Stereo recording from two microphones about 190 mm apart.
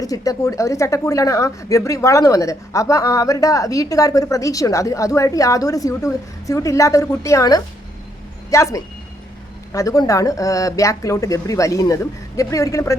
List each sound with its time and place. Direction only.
0.0 s a woman's voice: 20° left (ahead or behind)